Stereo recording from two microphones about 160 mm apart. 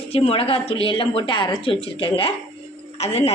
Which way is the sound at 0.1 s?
35° left (ahead or behind).